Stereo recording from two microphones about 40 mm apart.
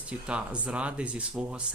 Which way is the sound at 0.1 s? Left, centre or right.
Right.